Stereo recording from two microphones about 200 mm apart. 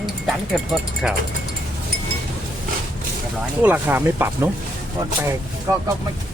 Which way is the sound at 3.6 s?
10° right (ahead or behind).